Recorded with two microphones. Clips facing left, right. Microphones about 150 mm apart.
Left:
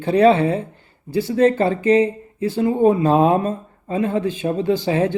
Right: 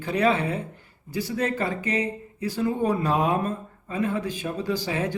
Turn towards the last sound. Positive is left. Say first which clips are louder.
# left 8 dB
turn(degrees=30)  # may be behind; listen again after turning